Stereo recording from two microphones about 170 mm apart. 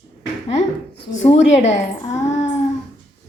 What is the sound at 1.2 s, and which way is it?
Speech, 40° left (ahead or behind).